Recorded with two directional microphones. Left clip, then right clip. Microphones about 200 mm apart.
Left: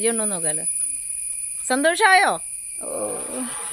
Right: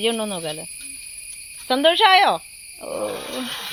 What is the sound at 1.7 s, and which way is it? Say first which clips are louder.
Cricket: right 2 dB; 15° left (ahead or behind).